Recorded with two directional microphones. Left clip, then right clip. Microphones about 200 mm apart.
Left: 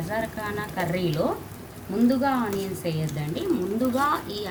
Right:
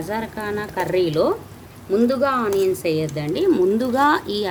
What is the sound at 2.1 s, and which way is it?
Speech, 60° right (ahead or behind).